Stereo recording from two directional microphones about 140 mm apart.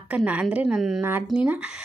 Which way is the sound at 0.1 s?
10° right (ahead or behind).